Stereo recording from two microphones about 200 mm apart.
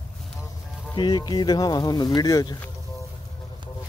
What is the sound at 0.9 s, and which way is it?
Speech, 20° left (ahead or behind).